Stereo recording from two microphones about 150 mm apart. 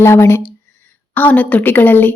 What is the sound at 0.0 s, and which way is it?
A woman's voice, 15° left (ahead or behind).